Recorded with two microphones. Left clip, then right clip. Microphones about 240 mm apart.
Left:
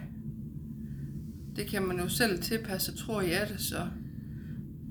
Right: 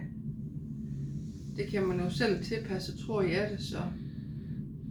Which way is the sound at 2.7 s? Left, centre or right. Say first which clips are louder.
Right 1 dB; left.